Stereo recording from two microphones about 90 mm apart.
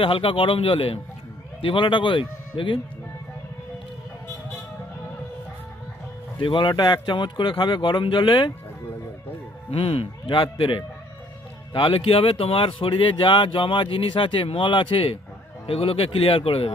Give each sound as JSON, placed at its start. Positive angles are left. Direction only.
{"t": 0.0, "sound": "speech", "side_deg": 85}
{"t": 1.6, "sound": "speech", "side_deg": 70}
{"t": 6.4, "sound": "speech", "side_deg": 65}
{"t": 9.7, "sound": "a man's voice", "side_deg": 85}